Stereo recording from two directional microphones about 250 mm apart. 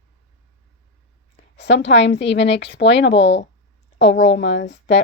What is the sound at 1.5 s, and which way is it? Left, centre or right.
A woman's voice, left.